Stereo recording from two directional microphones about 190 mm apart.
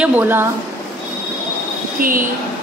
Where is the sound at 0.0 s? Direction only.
10° right (ahead or behind).